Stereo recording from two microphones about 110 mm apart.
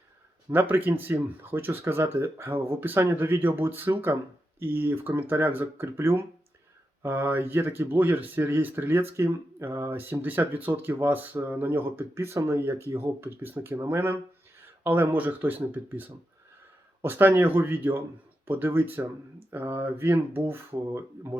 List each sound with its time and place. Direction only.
0.5 s speech: 15° right (ahead or behind)